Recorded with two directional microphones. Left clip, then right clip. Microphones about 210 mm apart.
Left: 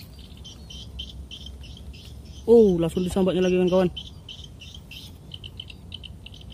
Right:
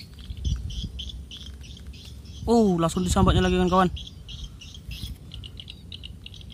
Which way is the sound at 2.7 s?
50° right (ahead or behind).